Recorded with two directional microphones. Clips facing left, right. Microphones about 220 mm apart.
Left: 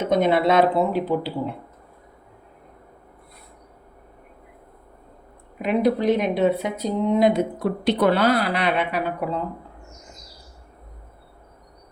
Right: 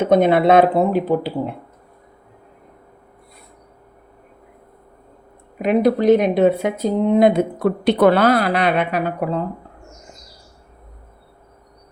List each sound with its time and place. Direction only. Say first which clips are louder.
0.1 s speech: right 5 dB; 55° right (ahead or behind)
5.6 s speech: right 5 dB; 45° right (ahead or behind)